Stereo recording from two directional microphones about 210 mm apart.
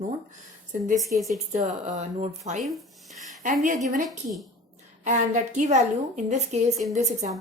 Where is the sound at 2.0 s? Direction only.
35° right (ahead or behind).